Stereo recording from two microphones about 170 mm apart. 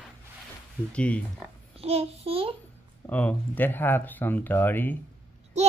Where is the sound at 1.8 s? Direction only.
35° right (ahead or behind).